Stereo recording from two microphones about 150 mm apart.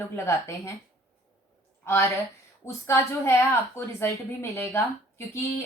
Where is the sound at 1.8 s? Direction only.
20° left (ahead or behind).